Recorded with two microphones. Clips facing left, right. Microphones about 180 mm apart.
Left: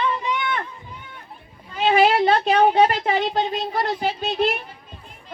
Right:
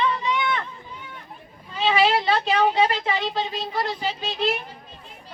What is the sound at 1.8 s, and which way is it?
Speech, 50° left (ahead or behind).